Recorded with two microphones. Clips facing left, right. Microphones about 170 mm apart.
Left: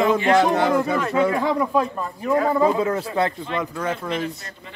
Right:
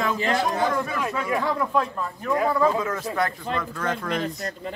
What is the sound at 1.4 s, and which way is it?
Speech, 10° left (ahead or behind).